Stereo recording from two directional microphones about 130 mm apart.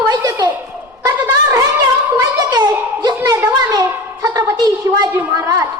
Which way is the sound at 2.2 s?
30° right (ahead or behind).